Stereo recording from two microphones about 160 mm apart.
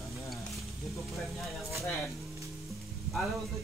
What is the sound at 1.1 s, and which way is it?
Speech, centre (ahead or behind).